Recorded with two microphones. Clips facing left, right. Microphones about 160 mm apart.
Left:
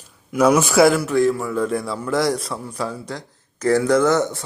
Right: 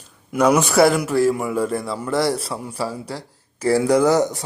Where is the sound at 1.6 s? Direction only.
Centre (ahead or behind).